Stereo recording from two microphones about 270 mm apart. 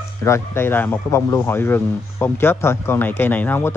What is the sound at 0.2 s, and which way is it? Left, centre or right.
A man's voice, centre.